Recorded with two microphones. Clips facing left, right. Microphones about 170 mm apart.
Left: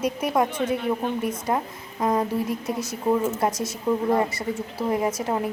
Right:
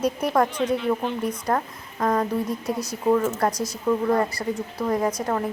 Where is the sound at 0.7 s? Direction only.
50° left (ahead or behind).